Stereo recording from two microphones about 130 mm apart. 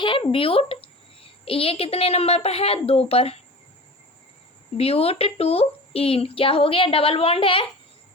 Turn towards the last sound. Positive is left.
turn(degrees=45)  # may be behind; listen again after turning